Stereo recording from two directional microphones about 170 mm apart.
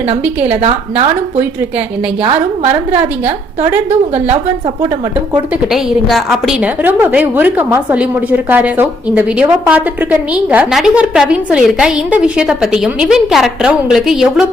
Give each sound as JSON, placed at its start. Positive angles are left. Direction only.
{"t": 0.1, "sound": "a woman's voice", "side_deg": -35}
{"t": 3.8, "sound": "a woman's voice", "side_deg": -40}
{"t": 5.7, "sound": "a woman's voice", "side_deg": 0}